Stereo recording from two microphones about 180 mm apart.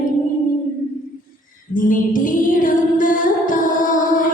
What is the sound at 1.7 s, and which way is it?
Music, 50° left (ahead or behind).